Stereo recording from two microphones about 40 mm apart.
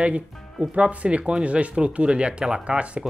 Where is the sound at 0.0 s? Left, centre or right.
Right.